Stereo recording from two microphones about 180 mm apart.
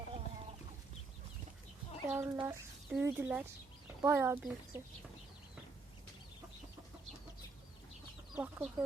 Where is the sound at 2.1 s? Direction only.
15° right (ahead or behind).